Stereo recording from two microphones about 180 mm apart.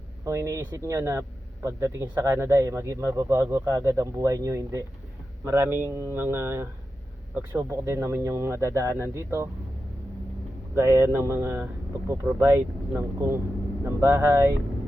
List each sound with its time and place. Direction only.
0.3 s speech: 15° right (ahead or behind)
10.8 s speech: 15° right (ahead or behind)